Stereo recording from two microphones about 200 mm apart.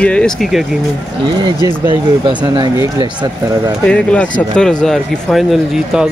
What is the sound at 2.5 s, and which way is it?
Speech, 25° right (ahead or behind).